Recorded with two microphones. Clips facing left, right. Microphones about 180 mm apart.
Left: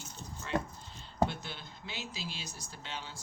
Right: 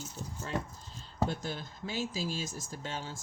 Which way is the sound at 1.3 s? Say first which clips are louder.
Right 6 dB; 40° right (ahead or behind).